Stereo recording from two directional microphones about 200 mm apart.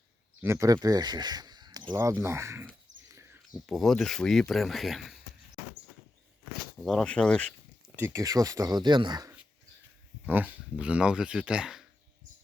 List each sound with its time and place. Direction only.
0.4 s speech: 15° right (ahead or behind)
3.1 s a sound: 15° right (ahead or behind)
3.7 s speech: centre (ahead or behind)
6.8 s speech: 5° left (ahead or behind)
7.9 s speech: 15° right (ahead or behind)
10.2 s speech: 10° right (ahead or behind)